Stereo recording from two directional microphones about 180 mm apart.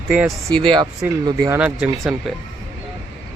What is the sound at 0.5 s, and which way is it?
Speech, 25° right (ahead or behind).